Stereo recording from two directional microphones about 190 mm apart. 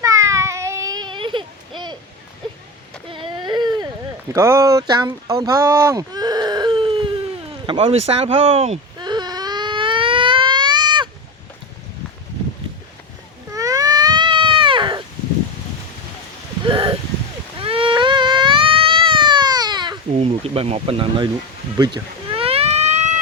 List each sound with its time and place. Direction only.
0.0 s baby cry: 15° right (ahead or behind)
3.1 s baby cry: 25° right (ahead or behind)
4.3 s speech: 15° right (ahead or behind)
7.7 s baby cry: 30° right (ahead or behind)
13.5 s baby cry: 15° right (ahead or behind)
16.6 s a sound: 25° right (ahead or behind)
17.6 s baby cry: 30° right (ahead or behind)
21.8 s a sound: 25° right (ahead or behind)